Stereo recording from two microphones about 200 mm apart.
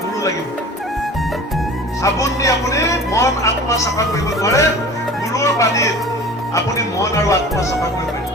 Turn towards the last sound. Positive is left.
turn(degrees=15)  # may be behind; listen again after turning